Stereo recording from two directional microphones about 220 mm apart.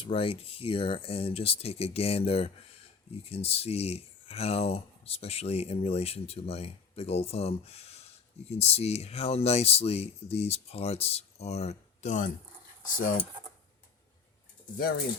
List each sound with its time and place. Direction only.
0.0 s speech: 25° left (ahead or behind)